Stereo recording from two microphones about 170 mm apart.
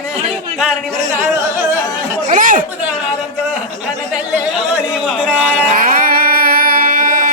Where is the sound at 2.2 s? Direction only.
50° right (ahead or behind).